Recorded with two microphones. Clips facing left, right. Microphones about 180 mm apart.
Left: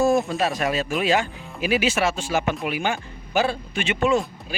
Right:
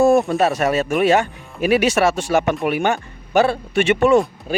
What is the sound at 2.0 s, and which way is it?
Speech, 65° right (ahead or behind).